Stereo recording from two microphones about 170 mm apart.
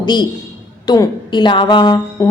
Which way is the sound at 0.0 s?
25° left (ahead or behind).